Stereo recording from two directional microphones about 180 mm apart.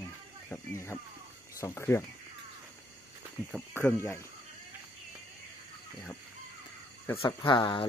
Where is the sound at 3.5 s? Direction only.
10° left (ahead or behind).